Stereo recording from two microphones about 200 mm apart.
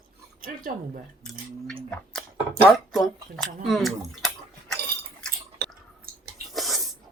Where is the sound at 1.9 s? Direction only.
5° left (ahead or behind).